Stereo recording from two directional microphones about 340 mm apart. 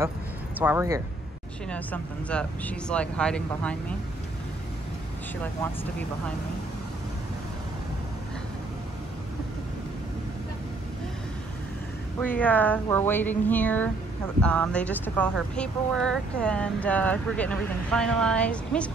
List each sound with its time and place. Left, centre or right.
0.6 s speech: centre
1.7 s speech: centre
5.4 s speech: centre
12.2 s speech: centre